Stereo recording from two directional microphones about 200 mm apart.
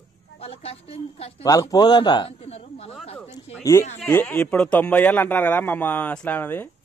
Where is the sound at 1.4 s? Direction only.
20° left (ahead or behind).